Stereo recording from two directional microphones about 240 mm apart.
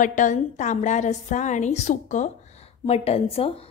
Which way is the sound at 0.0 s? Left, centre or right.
Left.